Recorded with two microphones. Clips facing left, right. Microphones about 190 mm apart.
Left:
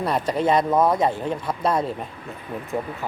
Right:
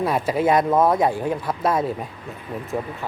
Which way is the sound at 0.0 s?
5° right (ahead or behind).